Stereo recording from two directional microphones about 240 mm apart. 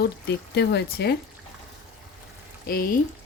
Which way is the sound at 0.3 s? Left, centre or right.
Left.